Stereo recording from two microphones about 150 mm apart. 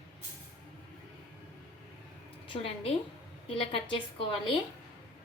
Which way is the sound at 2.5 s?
40° left (ahead or behind).